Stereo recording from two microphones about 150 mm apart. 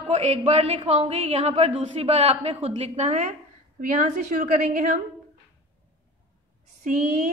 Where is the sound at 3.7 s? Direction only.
65° right (ahead or behind).